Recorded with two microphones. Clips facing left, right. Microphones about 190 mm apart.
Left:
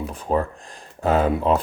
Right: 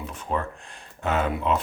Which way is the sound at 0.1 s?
35° left (ahead or behind).